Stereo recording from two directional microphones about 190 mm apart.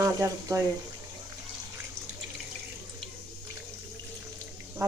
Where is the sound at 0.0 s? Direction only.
15° right (ahead or behind).